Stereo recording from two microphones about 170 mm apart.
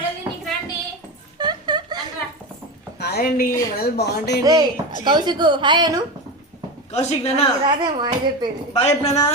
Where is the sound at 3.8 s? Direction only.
70° left (ahead or behind).